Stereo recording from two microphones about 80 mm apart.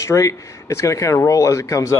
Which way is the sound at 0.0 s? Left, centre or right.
Left.